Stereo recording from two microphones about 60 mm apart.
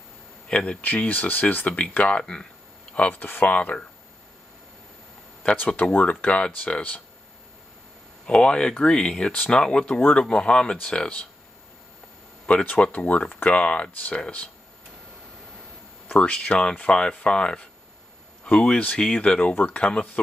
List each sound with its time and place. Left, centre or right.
0.5 s speech: centre
5.4 s speech: centre
8.3 s speech: centre
12.4 s speech: left
16.1 s speech: centre
19.5 s speech: left
19.8 s speech: left